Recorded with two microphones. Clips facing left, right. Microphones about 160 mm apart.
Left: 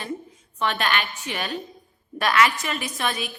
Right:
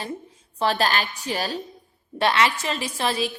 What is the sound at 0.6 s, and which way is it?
A woman's voice, 35° right (ahead or behind).